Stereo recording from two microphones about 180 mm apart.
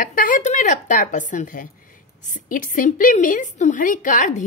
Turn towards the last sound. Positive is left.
turn(degrees=45)  # may be behind; listen again after turning